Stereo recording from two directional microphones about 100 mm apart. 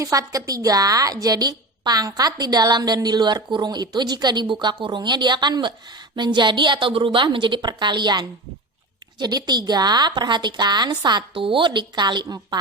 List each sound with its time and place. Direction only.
0.0 s a woman's voice: 35° right (ahead or behind)
11.3 s a woman's voice: 60° right (ahead or behind)